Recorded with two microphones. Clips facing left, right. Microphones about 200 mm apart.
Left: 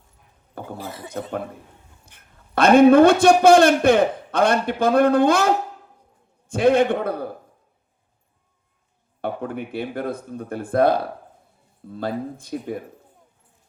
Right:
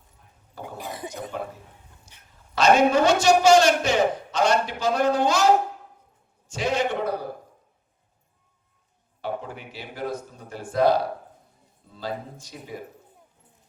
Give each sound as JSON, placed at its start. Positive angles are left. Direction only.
{"t": 0.8, "sound": "speech", "side_deg": -15}
{"t": 1.3, "sound": "a man's voice", "side_deg": 55}
{"t": 9.2, "sound": "a man's voice", "side_deg": 55}